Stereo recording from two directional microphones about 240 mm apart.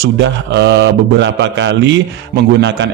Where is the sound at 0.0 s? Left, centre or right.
Right.